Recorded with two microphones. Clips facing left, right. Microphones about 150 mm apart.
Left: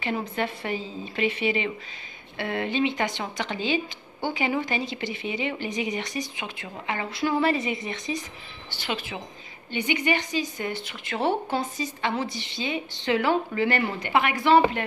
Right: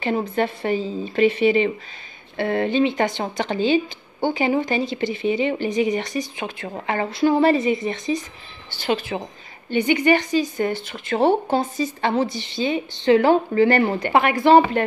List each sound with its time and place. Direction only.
0.0 s speech: 35° right (ahead or behind)
6.4 s speech: 45° right (ahead or behind)
7.2 s a woman's voice: 30° right (ahead or behind)